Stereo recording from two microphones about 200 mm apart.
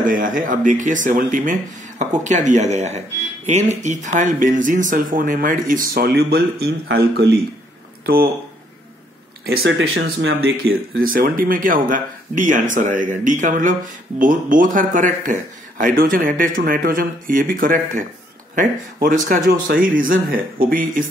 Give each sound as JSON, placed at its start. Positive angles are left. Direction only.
{"t": 0.0, "sound": "speech", "side_deg": -40}
{"t": 9.6, "sound": "speech", "side_deg": -80}